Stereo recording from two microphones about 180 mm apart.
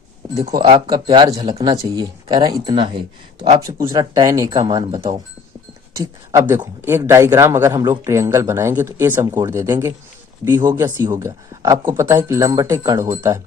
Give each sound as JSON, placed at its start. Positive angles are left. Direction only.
{"t": 0.9, "sound": "speech", "side_deg": -25}
{"t": 3.7, "sound": "speech", "side_deg": -15}